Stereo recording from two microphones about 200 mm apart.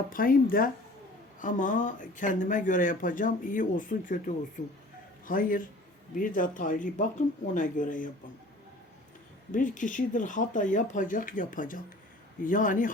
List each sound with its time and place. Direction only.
0.1 s a man's voice: 45° left (ahead or behind)
9.5 s speech: 40° left (ahead or behind)